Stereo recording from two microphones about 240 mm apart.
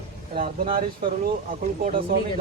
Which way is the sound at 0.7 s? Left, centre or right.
Right.